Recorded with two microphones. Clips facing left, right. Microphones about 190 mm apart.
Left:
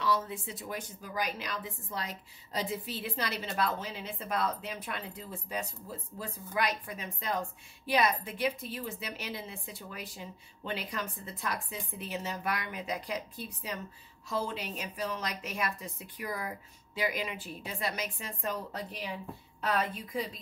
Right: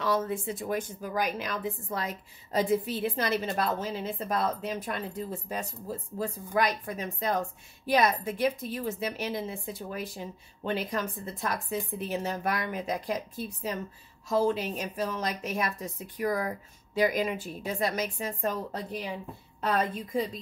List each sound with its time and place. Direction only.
0.0 s a woman's voice: 50° right (ahead or behind)